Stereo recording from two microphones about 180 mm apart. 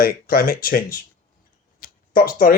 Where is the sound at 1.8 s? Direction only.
55° left (ahead or behind).